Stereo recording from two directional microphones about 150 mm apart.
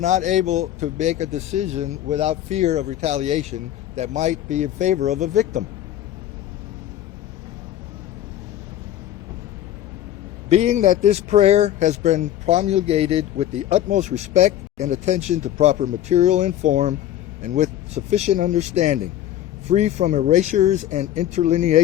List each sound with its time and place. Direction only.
0.0 s speech: 55° right (ahead or behind)
10.5 s speech: 50° right (ahead or behind)